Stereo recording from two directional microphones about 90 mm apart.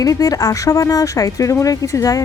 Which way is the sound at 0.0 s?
40° left (ahead or behind).